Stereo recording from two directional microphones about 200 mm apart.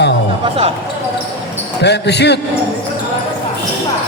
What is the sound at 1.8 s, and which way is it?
Speech, 55° left (ahead or behind).